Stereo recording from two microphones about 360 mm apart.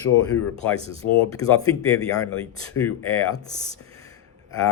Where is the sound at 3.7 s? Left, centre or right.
Centre.